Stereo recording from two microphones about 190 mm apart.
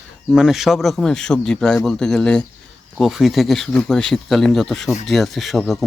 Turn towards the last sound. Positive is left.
turn(degrees=0)  # may be behind; listen again after turning